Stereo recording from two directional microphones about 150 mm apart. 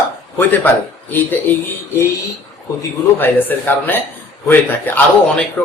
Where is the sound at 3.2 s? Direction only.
10° left (ahead or behind).